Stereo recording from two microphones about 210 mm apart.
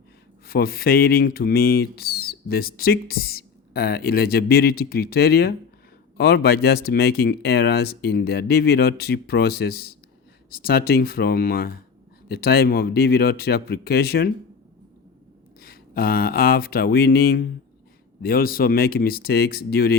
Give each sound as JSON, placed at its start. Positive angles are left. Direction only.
{"t": 0.4, "sound": "speech", "side_deg": 45}
{"t": 15.6, "sound": "speech", "side_deg": 45}